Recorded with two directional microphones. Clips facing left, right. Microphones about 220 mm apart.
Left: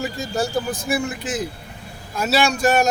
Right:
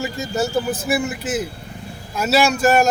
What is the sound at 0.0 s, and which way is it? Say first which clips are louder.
A man's voice: right 2 dB; centre (ahead or behind).